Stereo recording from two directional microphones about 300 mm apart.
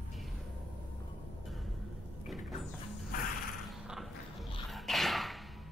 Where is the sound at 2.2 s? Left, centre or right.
Centre.